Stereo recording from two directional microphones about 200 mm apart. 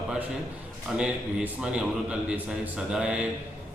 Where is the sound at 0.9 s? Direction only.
5° right (ahead or behind).